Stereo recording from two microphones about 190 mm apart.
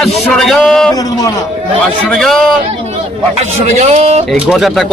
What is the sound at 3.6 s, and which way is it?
Speech, 35° right (ahead or behind).